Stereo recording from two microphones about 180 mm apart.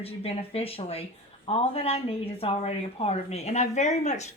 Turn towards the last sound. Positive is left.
turn(degrees=40)  # may be behind; listen again after turning